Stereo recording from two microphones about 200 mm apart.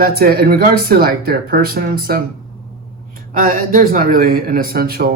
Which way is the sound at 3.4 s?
40° right (ahead or behind).